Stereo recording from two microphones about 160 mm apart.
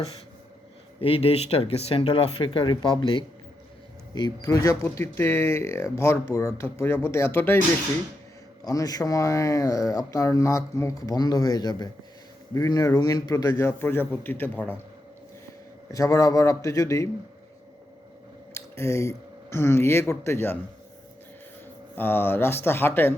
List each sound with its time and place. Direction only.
1.0 s speech: 35° left (ahead or behind)
4.4 s speech: 20° left (ahead or behind)
8.6 s speech: 20° left (ahead or behind)
15.9 s speech: 20° left (ahead or behind)
18.5 s speech: 15° left (ahead or behind)
21.9 s speech: 15° left (ahead or behind)